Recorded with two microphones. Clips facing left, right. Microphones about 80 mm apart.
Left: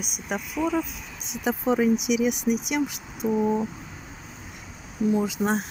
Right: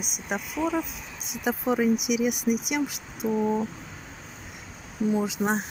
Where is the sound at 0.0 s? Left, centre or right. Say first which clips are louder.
Left 1 dB; centre.